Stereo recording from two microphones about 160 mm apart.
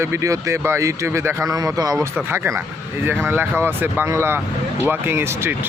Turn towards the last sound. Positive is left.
turn(degrees=-15)  # may be behind; listen again after turning